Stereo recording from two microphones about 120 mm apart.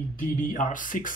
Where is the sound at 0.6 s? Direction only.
90° left.